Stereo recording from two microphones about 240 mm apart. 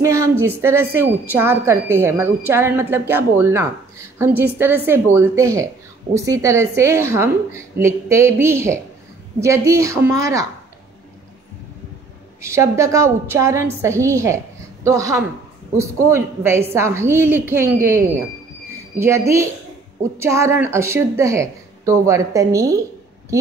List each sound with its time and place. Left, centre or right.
0.0 s a woman's voice: centre
12.4 s a woman's voice: centre